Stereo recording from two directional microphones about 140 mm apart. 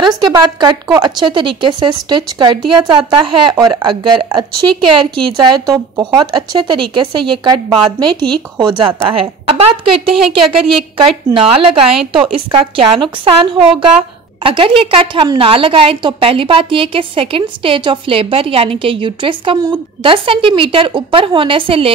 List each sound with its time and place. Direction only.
0.9 s a woman's voice: 35° right (ahead or behind)